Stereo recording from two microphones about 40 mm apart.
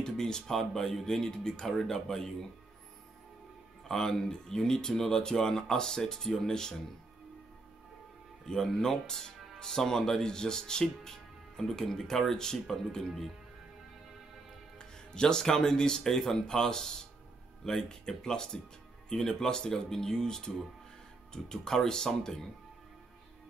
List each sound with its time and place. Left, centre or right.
0.0 s speech: centre
3.8 s speech: centre
8.5 s speech: centre
14.8 s speech: centre